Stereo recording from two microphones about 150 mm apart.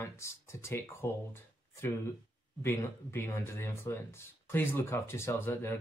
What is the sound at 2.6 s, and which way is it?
Speech, 15° left (ahead or behind).